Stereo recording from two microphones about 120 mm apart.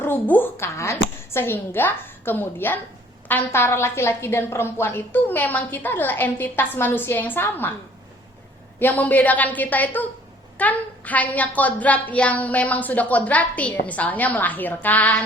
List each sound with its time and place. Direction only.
0.0 s a woman's voice: 15° left (ahead or behind)
8.8 s a woman's voice: 15° left (ahead or behind)